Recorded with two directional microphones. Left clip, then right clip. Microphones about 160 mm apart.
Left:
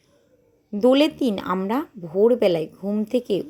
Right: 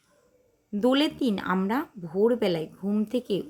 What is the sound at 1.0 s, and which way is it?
Speech, 35° right (ahead or behind).